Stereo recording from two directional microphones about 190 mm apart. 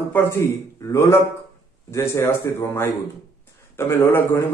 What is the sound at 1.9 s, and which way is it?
A man's voice, 15° left (ahead or behind).